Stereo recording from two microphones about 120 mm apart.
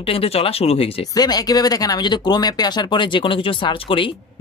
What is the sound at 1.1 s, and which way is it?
Speech, 35° left (ahead or behind).